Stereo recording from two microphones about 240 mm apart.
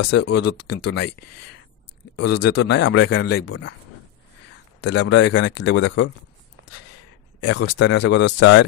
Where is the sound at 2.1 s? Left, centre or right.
Left.